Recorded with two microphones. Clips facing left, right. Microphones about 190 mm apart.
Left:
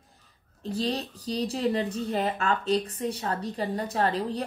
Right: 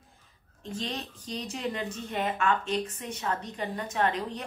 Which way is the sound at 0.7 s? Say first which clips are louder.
Left 6 dB; 35° left (ahead or behind).